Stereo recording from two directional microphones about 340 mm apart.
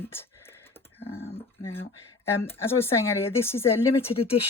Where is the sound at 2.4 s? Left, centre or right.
Centre.